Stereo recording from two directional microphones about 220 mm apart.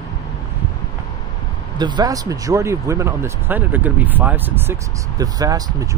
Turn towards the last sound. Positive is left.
turn(degrees=-15)  # may be behind; listen again after turning